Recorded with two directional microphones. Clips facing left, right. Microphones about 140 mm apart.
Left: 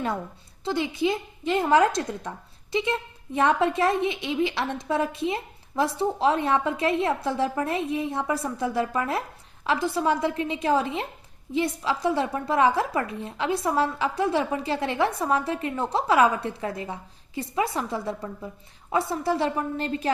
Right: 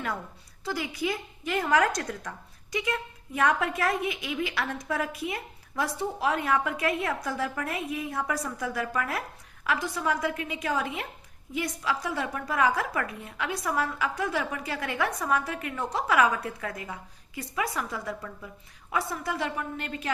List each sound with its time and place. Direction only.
0.6 s a woman's voice: 25° left (ahead or behind)